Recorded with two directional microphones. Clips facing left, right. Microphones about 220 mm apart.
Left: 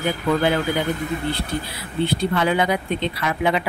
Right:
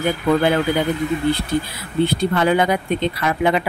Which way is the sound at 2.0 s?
45° right (ahead or behind).